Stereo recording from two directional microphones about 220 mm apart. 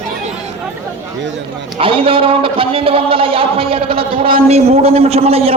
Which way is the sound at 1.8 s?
25° right (ahead or behind).